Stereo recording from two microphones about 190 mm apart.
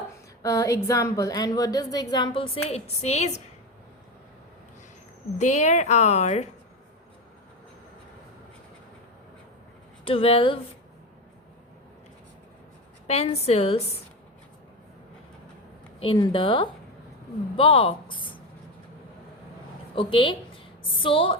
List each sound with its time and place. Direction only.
0.4 s a woman's voice: 15° left (ahead or behind); by 3.3 s 35° left (ahead or behind)
5.4 s a woman's voice: 40° left (ahead or behind)
10.0 s a woman's voice: 30° left (ahead or behind)
13.1 s a woman's voice: 35° left (ahead or behind)
16.0 s a woman's voice: 25° left (ahead or behind)
20.0 s a woman's voice: 25° left (ahead or behind)